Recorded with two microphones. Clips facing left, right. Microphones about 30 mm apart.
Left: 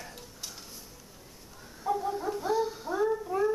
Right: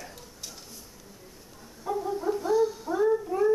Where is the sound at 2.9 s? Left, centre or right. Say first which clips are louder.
Right 3 dB; centre.